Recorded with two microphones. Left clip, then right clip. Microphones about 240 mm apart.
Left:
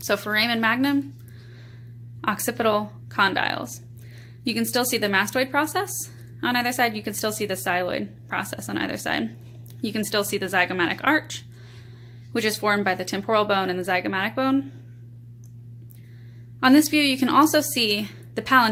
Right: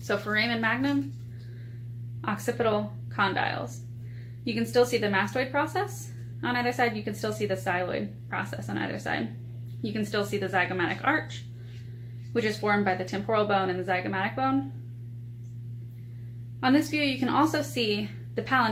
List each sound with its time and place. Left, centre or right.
0.1 s speech: left
2.2 s speech: left
16.6 s speech: left